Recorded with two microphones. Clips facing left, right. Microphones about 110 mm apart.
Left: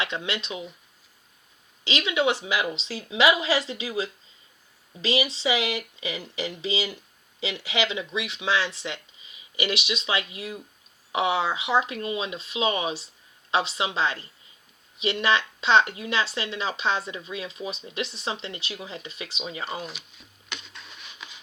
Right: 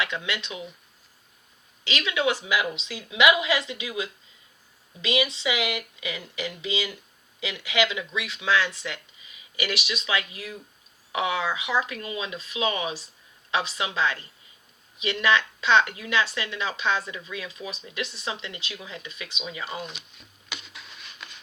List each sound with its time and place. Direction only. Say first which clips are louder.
0.0 s speech: even; 25° left (ahead or behind)
1.8 s a woman's voice: left 2 dB; 25° left (ahead or behind)
20.1 s a sound: even; centre (ahead or behind)